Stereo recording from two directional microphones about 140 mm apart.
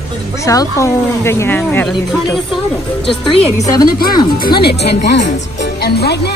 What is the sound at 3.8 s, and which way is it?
Speech, 90° left.